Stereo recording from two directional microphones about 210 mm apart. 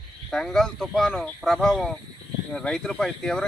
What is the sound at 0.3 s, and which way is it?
Speech, centre (ahead or behind).